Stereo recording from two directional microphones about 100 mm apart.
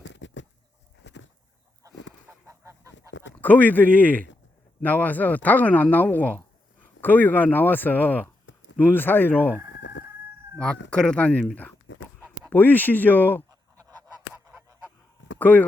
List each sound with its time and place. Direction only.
1.8 s chicken: 40° right (ahead or behind)
2.5 s goose: 30° right (ahead or behind)
3.4 s speech: 15° left (ahead or behind)
9.3 s speech: 15° right (ahead or behind)
10.6 s speech: 10° left (ahead or behind)
12.5 s speech: 20° left (ahead or behind)
13.5 s goose: 35° right (ahead or behind)
14.4 s goose: 25° right (ahead or behind)
15.4 s speech: 15° left (ahead or behind)